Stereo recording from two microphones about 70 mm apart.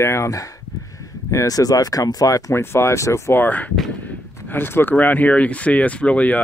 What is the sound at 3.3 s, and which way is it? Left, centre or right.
Speech, left.